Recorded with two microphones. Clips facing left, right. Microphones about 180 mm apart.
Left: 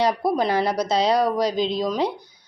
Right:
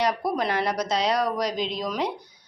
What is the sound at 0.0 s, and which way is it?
A woman's voice, 30° left (ahead or behind).